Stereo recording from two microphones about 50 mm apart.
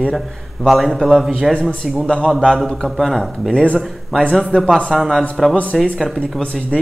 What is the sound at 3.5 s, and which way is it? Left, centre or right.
Speech, left.